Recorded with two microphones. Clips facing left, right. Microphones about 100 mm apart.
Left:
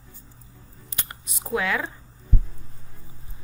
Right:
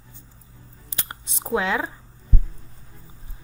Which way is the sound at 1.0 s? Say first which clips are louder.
Right 3 dB; 30° right (ahead or behind).